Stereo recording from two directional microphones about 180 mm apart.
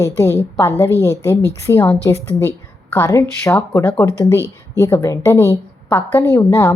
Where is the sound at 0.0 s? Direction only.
15° left (ahead or behind).